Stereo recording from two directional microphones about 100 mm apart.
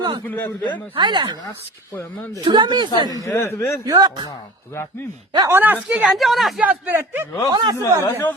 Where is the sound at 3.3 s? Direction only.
25° left (ahead or behind).